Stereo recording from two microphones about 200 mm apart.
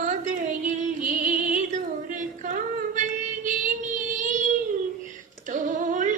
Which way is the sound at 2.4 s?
40° right (ahead or behind).